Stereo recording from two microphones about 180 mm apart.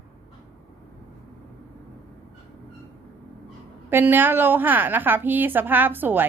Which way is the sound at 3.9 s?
10° right (ahead or behind).